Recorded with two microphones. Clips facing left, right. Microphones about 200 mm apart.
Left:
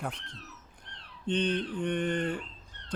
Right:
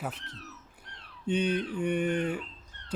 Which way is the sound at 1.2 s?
10° right (ahead or behind).